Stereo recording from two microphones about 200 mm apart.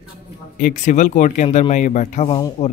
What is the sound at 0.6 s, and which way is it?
Speech, 40° left (ahead or behind).